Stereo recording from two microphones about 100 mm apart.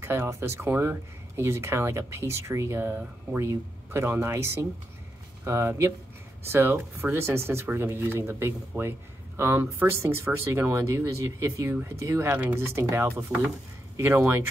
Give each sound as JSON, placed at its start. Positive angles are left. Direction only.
{"t": 0.0, "sound": "speech", "side_deg": -25}